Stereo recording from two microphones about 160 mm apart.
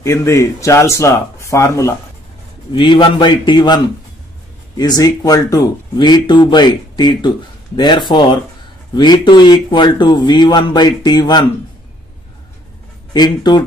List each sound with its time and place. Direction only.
0.0 s speech: 20° left (ahead or behind)
2.7 s speech: 30° left (ahead or behind)
13.1 s speech: 25° left (ahead or behind)